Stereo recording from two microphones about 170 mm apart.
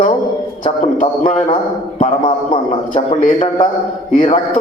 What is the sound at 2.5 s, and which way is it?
A man's voice, 40° left (ahead or behind).